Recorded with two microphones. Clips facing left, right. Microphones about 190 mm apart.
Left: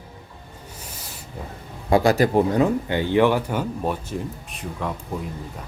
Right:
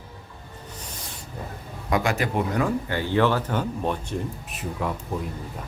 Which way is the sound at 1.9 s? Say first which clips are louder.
Left 7 dB; 35° left (ahead or behind).